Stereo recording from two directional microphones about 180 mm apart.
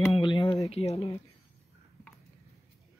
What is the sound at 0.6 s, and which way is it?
Speech, 35° left (ahead or behind).